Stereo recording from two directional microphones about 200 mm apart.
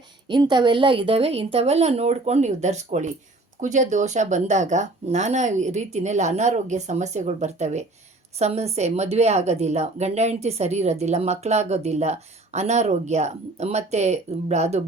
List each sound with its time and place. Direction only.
0.3 s a woman's voice: 25° right (ahead or behind)